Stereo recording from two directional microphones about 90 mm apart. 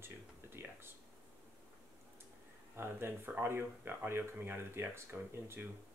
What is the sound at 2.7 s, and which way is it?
Speech, 25° right (ahead or behind).